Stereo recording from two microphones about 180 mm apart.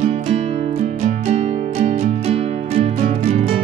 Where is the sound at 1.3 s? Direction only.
35° right (ahead or behind).